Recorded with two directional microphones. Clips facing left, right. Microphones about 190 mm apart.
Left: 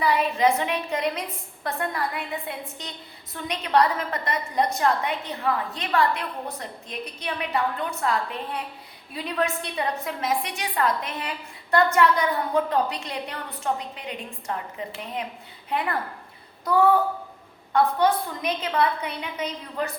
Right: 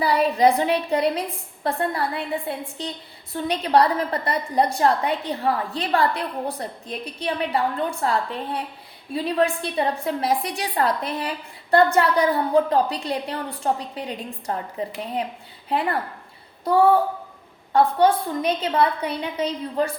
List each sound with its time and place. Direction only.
0.0 s a woman's voice: 35° right (ahead or behind)
17.7 s a woman's voice: 30° right (ahead or behind)